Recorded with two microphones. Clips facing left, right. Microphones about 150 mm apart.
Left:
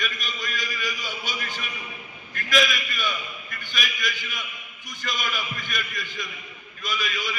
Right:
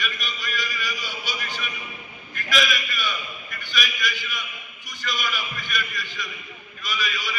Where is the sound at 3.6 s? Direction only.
50° left (ahead or behind).